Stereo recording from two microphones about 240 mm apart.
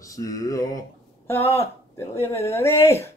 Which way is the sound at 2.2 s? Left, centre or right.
Centre.